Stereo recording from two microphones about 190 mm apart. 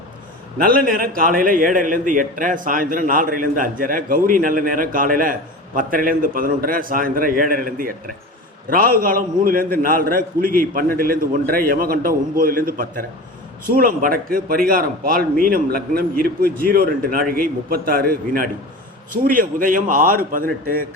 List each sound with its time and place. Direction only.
0.6 s a man's voice: 50° right (ahead or behind)